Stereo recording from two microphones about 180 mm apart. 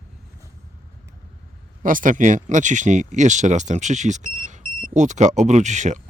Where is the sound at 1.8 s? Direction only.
50° right (ahead or behind).